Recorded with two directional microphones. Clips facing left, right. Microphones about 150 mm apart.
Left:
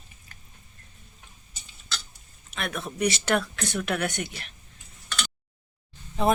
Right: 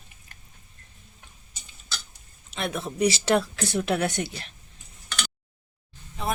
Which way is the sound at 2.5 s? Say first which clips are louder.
Right 3 dB; 25° right (ahead or behind).